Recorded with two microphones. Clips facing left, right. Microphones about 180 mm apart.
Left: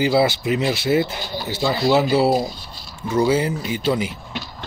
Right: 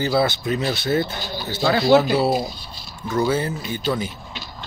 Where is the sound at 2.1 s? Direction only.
30° left (ahead or behind).